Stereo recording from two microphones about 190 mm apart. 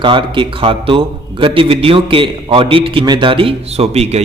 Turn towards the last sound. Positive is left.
turn(degrees=-35)  # may be behind; listen again after turning